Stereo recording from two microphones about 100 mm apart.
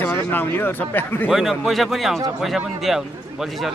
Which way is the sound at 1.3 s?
Centre (ahead or behind).